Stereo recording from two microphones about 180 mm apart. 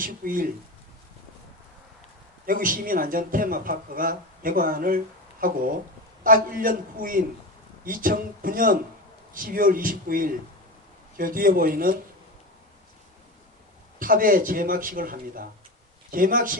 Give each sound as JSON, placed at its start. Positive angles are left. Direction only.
{"t": 0.0, "sound": "speech", "side_deg": -50}
{"t": 2.5, "sound": "speech", "side_deg": -50}
{"t": 14.0, "sound": "speech", "side_deg": -50}